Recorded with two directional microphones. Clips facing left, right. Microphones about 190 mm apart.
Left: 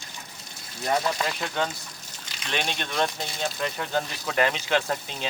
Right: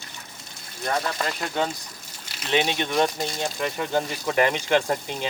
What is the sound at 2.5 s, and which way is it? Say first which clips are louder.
Speech: right 7 dB; 15° right (ahead or behind).